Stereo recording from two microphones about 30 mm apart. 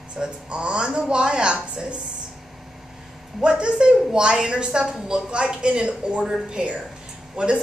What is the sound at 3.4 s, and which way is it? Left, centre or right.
A woman's voice, right.